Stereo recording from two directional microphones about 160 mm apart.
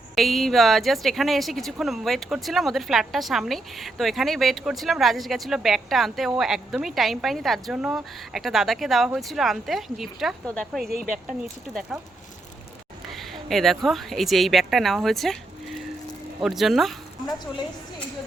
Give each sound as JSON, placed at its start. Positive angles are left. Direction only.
{"t": 0.2, "sound": "speech", "side_deg": 0}
{"t": 10.9, "sound": "speech", "side_deg": -60}
{"t": 11.7, "sound": "speech", "side_deg": 0}
{"t": 13.1, "sound": "a woman's voice", "side_deg": 0}